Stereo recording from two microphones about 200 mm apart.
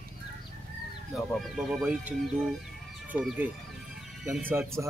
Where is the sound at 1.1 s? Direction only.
Centre (ahead or behind).